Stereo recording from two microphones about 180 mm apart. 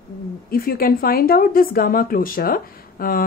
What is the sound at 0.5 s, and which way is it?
A woman's voice, 55° left (ahead or behind).